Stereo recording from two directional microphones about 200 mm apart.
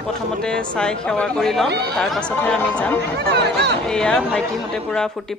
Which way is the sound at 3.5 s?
55° right (ahead or behind).